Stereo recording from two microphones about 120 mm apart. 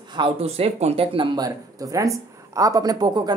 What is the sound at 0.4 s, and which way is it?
Speech, 55° right (ahead or behind).